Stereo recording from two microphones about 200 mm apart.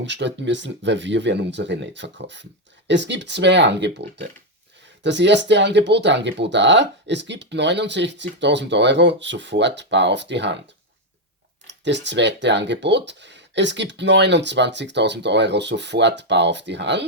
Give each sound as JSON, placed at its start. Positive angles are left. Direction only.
{"t": 0.0, "sound": "speech", "side_deg": -65}
{"t": 11.6, "sound": "speech", "side_deg": -60}